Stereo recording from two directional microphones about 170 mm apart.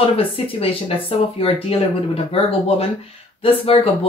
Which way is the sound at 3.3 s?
35° left (ahead or behind).